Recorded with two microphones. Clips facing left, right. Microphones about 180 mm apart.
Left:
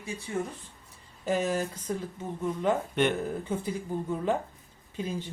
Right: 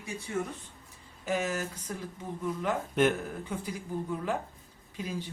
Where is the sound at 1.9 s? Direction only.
25° left (ahead or behind).